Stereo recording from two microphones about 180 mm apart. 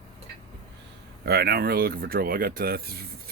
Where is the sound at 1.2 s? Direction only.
60° right (ahead or behind).